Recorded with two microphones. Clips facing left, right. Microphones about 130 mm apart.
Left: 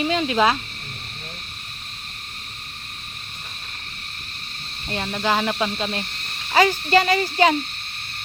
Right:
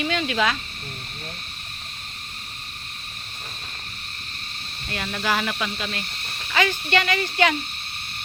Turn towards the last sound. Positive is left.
turn(degrees=35)  # may be behind; listen again after turning